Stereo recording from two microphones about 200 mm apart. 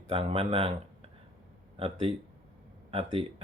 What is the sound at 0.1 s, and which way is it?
Speech, 30° right (ahead or behind).